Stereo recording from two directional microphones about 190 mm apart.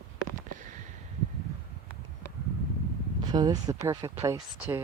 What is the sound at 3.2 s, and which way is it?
Speech, 20° right (ahead or behind).